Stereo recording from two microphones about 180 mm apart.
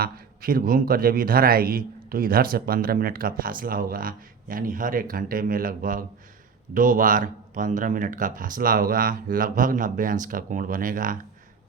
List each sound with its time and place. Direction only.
0.0 s speech: 55° right (ahead or behind)